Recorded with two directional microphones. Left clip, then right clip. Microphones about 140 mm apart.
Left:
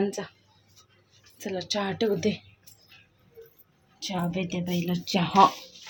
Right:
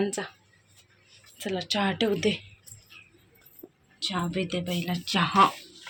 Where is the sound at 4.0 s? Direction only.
Centre (ahead or behind).